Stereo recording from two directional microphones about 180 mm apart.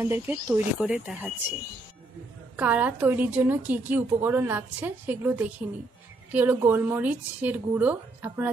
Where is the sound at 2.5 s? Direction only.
10° right (ahead or behind).